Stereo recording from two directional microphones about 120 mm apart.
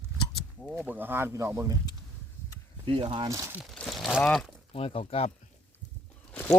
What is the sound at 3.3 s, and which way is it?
Speech, 25° right (ahead or behind).